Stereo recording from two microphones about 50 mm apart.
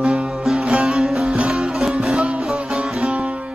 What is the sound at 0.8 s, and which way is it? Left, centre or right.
Music, centre.